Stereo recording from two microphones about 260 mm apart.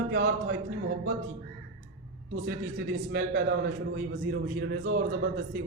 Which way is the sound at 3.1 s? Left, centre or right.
Right.